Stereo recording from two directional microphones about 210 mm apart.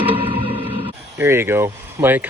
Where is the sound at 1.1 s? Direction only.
10° right (ahead or behind).